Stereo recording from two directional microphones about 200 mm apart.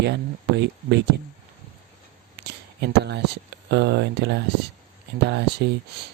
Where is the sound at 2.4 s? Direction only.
60° right (ahead or behind).